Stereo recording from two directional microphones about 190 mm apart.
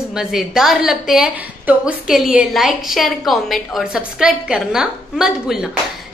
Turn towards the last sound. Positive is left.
turn(degrees=-5)  # may be behind; listen again after turning